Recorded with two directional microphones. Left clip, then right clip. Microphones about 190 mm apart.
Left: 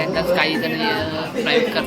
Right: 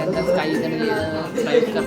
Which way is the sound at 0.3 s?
20° right (ahead or behind).